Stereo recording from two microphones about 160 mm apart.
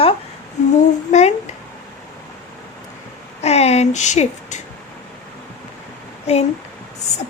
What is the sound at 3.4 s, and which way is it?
Speech, 40° left (ahead or behind).